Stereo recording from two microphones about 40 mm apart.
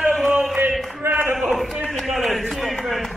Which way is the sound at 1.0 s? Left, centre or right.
Right.